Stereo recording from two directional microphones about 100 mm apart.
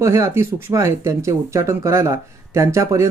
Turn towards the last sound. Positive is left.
turn(degrees=-30)  # may be behind; listen again after turning